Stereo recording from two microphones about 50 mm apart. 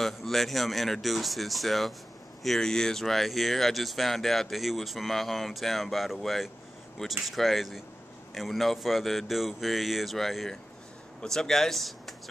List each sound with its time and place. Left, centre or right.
0.0 s speech: centre